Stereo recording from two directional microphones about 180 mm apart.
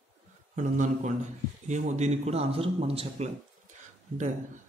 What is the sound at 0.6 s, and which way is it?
A man's voice, 45° right (ahead or behind).